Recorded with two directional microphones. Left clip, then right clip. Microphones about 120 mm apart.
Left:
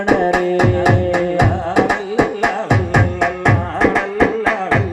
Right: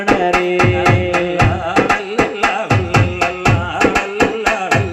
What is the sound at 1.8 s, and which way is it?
Music, 55° right (ahead or behind).